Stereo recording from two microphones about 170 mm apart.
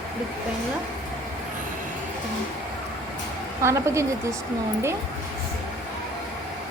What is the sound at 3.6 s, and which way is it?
Speech, 15° right (ahead or behind).